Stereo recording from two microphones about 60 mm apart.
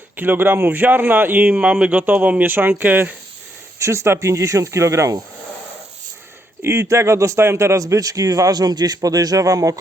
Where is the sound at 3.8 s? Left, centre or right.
Right.